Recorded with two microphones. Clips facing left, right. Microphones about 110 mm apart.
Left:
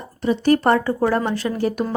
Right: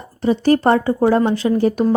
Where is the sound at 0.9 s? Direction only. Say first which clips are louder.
Right 5 dB; 15° right (ahead or behind).